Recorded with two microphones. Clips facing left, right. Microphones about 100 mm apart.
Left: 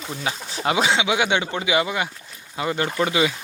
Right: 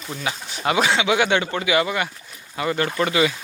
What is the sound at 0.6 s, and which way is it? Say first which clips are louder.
Speech: right 1 dB; 20° left (ahead or behind).